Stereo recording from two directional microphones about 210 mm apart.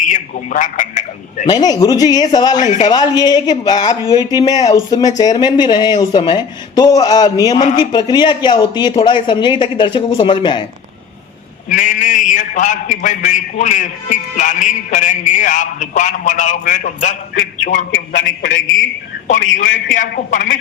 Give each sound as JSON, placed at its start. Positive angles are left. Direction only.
{"t": 0.0, "sound": "a man's voice", "side_deg": 40}
{"t": 1.5, "sound": "speech", "side_deg": 20}
{"t": 2.6, "sound": "a man's voice", "side_deg": 35}
{"t": 2.9, "sound": "speech", "side_deg": 20}
{"t": 11.7, "sound": "a man's voice", "side_deg": 35}